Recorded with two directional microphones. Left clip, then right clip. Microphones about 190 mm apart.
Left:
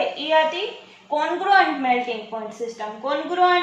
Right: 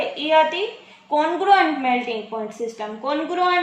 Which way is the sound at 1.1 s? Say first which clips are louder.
Right 2 dB; 35° right (ahead or behind).